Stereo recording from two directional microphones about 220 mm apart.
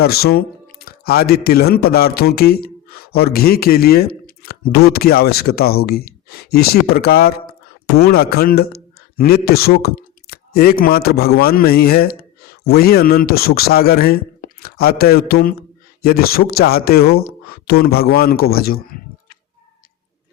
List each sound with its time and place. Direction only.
0.0 s speech: 45° left (ahead or behind)